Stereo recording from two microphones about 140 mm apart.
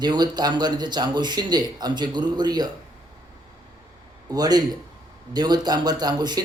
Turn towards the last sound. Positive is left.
turn(degrees=-30)  # may be behind; listen again after turning